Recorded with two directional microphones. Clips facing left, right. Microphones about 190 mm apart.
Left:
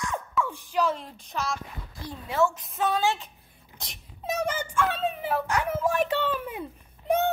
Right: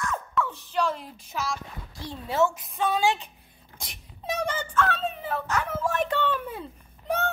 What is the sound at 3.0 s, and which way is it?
Speech, 15° right (ahead or behind).